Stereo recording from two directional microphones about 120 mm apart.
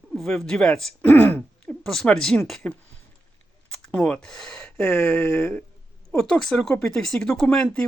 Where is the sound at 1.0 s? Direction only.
15° left (ahead or behind).